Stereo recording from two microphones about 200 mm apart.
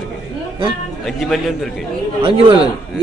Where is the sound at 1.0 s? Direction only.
Centre (ahead or behind).